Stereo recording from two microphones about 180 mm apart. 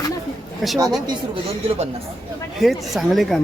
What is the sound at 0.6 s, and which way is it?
Speech, centre (ahead or behind).